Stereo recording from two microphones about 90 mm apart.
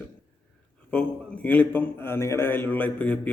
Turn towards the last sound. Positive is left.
turn(degrees=15)  # may be behind; listen again after turning